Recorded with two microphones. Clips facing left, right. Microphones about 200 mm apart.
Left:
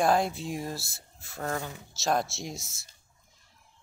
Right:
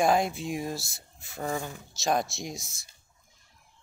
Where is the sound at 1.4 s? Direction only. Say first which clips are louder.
Right 1 dB; 5° right (ahead or behind).